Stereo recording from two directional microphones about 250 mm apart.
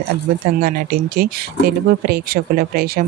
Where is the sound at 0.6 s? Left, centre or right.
Right.